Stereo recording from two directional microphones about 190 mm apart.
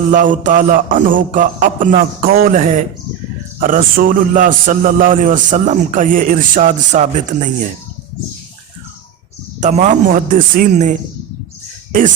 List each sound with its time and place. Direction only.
0.1 s a man's voice: 45° right (ahead or behind)
9.6 s a man's voice: 40° right (ahead or behind)